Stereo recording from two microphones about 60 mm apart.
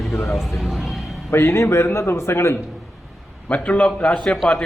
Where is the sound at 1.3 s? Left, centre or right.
Left.